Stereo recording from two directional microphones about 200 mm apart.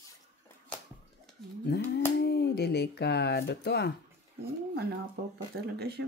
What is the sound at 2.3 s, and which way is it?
Speech, 55° left (ahead or behind).